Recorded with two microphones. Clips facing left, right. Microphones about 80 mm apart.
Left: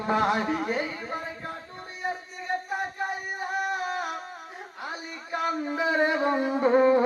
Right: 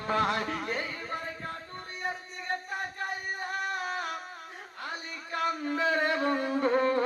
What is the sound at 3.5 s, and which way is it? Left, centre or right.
Music, centre.